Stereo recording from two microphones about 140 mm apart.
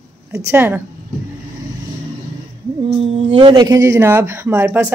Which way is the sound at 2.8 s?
45° right (ahead or behind).